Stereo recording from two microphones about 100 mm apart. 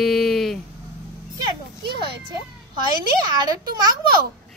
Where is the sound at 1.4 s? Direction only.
50° right (ahead or behind).